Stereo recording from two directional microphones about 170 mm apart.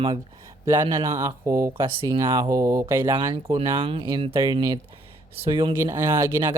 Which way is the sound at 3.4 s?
35° right (ahead or behind).